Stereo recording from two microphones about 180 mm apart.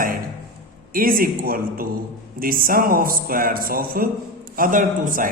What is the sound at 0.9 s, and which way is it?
A man's voice, 50° right (ahead or behind).